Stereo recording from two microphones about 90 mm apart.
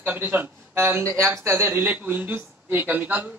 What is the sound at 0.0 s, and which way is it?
A man's voice, 20° right (ahead or behind).